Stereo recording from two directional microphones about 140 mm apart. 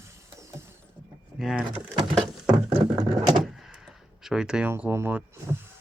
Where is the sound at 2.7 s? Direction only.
40° right (ahead or behind).